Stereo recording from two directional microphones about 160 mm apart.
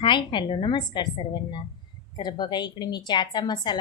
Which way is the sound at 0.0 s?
30° left (ahead or behind).